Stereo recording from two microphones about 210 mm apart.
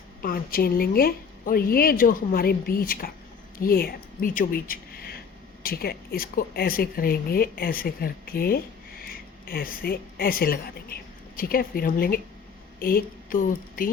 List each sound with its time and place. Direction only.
0.2 s a woman's voice: 45° left (ahead or behind)